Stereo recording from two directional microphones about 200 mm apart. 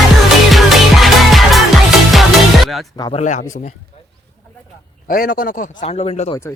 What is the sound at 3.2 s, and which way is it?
Speech, 40° left (ahead or behind).